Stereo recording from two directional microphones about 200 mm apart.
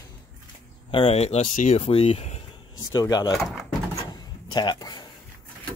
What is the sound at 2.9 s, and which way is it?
Speech, 20° left (ahead or behind).